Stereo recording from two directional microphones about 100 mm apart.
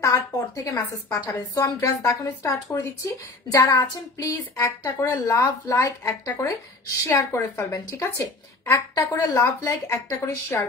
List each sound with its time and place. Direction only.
0.0 s a woman's voice: 30° left (ahead or behind)